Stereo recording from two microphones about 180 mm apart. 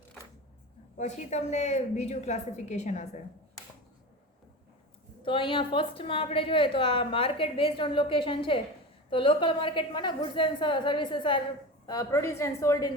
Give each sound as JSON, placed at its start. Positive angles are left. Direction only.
{"t": 0.9, "sound": "a woman's voice", "side_deg": 40}
{"t": 5.2, "sound": "a woman's voice", "side_deg": 30}